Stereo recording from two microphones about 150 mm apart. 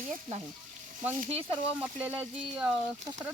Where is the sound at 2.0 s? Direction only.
10° right (ahead or behind).